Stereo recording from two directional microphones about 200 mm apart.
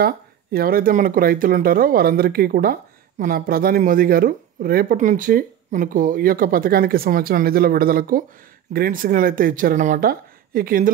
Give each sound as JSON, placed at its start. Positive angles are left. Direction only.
{"t": 0.0, "sound": "speech", "side_deg": -50}